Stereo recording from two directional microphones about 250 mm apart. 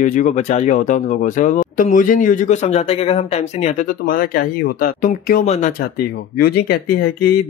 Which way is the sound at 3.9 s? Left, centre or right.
Left.